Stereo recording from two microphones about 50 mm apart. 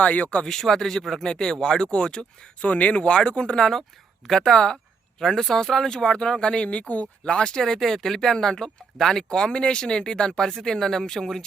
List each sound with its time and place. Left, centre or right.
0.0 s speech: left
0.4 s speech: centre
2.6 s speech: left
7.3 s speech: centre